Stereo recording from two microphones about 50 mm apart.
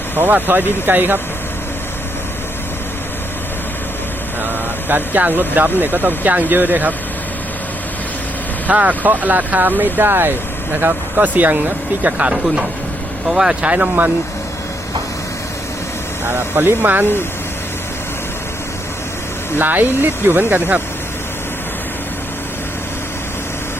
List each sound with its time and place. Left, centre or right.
0.2 s speech: right
4.9 s speech: right
8.6 s speech: right
11.2 s speech: right
12.1 s speech: centre
13.7 s speech: right
16.2 s speech: right
19.5 s speech: right